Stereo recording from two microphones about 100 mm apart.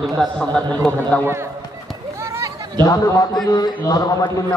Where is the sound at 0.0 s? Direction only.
5° left (ahead or behind).